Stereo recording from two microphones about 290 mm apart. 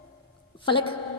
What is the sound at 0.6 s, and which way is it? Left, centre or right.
Speech, centre.